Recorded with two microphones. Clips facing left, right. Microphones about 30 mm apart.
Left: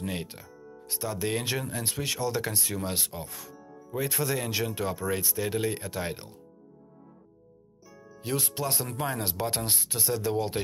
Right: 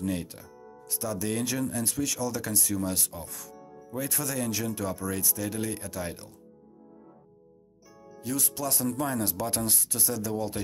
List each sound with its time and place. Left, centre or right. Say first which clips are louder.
0.0 s speech: right 3 dB; left
8.2 s speech: left 1 dB; left